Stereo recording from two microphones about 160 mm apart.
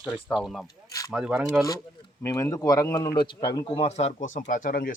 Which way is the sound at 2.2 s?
15° left (ahead or behind).